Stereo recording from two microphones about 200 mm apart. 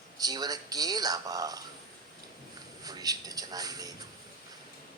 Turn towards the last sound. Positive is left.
turn(degrees=-20)  # may be behind; listen again after turning